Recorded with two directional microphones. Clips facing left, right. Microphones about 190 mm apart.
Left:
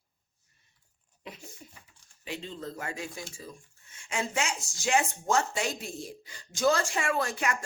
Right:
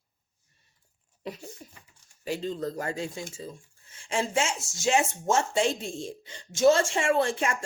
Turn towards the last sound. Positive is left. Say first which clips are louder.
# right 5 dB
turn(degrees=-25)  # may be behind; listen again after turning